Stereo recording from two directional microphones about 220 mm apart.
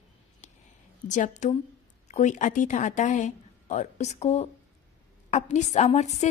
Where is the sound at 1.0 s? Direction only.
35° left (ahead or behind).